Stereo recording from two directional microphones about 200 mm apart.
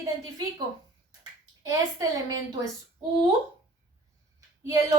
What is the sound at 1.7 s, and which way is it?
Speech, 15° right (ahead or behind).